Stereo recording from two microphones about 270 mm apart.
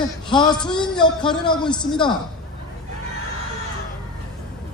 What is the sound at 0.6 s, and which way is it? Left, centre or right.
Speech, centre.